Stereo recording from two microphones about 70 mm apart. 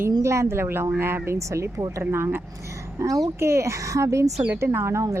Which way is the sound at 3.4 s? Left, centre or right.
Right.